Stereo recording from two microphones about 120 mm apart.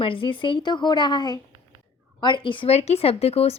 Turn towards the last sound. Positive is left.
turn(degrees=55)  # may be behind; listen again after turning